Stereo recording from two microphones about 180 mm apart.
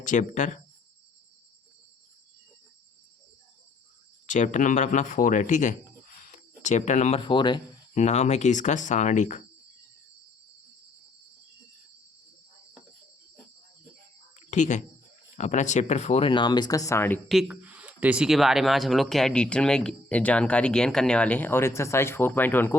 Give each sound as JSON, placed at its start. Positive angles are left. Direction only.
{"t": 0.0, "sound": "speech", "side_deg": 45}
{"t": 4.3, "sound": "speech", "side_deg": 45}
{"t": 7.9, "sound": "speech", "side_deg": 40}
{"t": 14.3, "sound": "a sound", "side_deg": 40}
{"t": 15.4, "sound": "speech", "side_deg": 40}
{"t": 17.2, "sound": "speech", "side_deg": -5}